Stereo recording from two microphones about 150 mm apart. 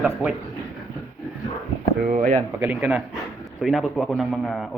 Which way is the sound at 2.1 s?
60° right (ahead or behind).